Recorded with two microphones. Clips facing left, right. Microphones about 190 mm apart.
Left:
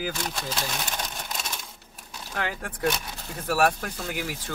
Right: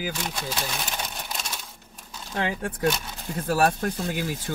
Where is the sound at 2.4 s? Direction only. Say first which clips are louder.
Right 3 dB; 25° right (ahead or behind).